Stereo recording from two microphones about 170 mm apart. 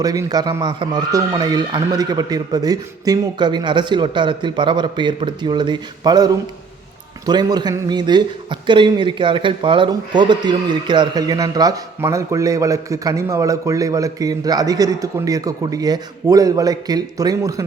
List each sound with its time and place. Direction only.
0.0 s a man's voice: 20° right (ahead or behind)